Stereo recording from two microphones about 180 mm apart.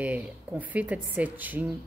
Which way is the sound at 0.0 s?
10° right (ahead or behind).